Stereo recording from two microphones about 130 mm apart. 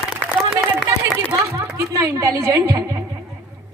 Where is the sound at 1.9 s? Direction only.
25° right (ahead or behind).